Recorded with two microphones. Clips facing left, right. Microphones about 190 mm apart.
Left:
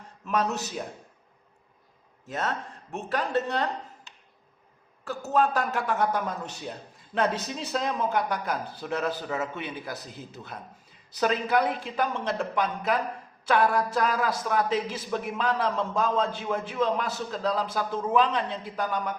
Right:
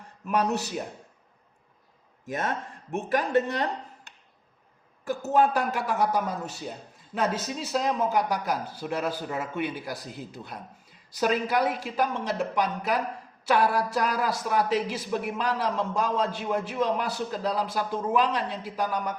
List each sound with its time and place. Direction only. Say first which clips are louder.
0.3 s speech: right 2 dB; 10° right (ahead or behind)
2.2 s speech: right 1 dB; 15° right (ahead or behind)
5.0 s speech: right 2 dB; 15° right (ahead or behind)
11.2 s speech: even; 10° right (ahead or behind)